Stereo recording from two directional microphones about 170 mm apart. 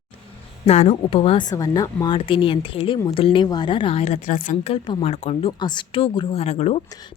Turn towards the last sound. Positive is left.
turn(degrees=40)  # may be behind; listen again after turning